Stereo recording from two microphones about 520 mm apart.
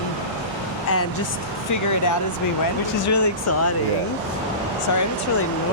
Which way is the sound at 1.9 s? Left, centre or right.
Left.